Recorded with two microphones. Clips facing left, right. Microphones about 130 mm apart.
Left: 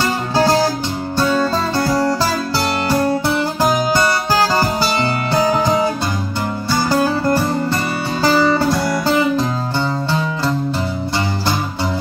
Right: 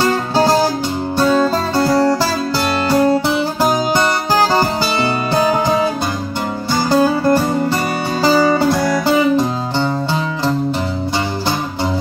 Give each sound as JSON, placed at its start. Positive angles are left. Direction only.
{"t": 0.0, "sound": "music", "side_deg": -15}
{"t": 2.9, "sound": "music", "side_deg": -15}
{"t": 5.3, "sound": "music", "side_deg": -15}